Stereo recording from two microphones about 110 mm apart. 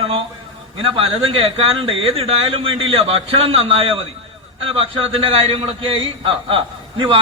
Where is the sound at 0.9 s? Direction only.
60° right (ahead or behind).